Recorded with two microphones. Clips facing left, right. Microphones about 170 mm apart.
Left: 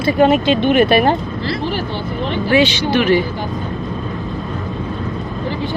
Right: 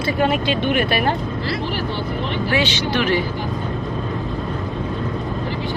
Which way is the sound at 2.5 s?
15° left (ahead or behind).